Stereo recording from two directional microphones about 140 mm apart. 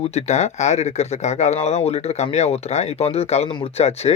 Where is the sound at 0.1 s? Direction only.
55° left (ahead or behind).